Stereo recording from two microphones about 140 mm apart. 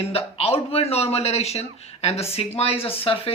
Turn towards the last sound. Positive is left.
turn(degrees=40)  # may be behind; listen again after turning